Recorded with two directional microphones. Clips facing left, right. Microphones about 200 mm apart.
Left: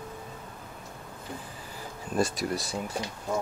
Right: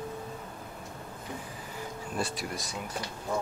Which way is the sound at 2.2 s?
40° left (ahead or behind).